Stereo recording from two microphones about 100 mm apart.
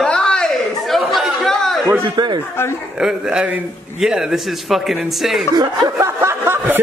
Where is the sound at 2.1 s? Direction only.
45° right (ahead or behind).